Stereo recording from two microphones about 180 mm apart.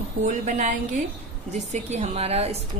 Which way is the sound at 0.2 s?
45° right (ahead or behind).